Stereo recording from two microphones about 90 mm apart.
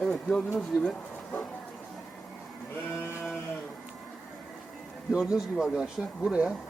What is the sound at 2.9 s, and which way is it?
Sheep, 25° left (ahead or behind).